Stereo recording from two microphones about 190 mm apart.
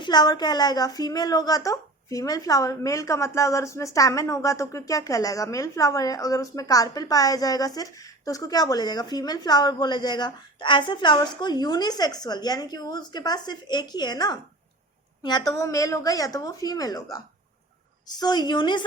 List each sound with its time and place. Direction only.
0.0 s a woman's voice: 20° left (ahead or behind)
18.2 s a woman's voice: 20° left (ahead or behind)